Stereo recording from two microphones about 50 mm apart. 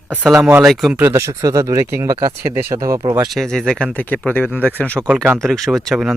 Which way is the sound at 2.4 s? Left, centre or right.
Right.